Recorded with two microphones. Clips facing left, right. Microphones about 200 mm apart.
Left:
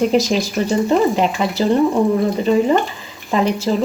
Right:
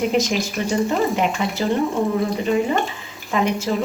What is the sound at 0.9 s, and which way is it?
Speech, centre (ahead or behind).